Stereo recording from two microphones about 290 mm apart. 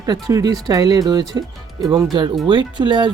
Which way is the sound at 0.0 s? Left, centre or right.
Centre.